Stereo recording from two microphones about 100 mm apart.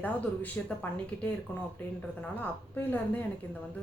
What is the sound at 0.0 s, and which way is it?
A woman's voice, 15° left (ahead or behind).